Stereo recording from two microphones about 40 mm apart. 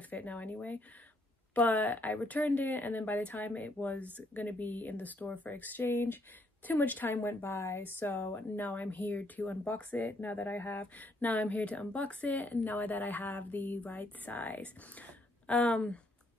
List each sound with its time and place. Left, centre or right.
0.1 s speech: left
6.7 s speech: left
7.2 s a woman's voice: left
7.8 s speech: left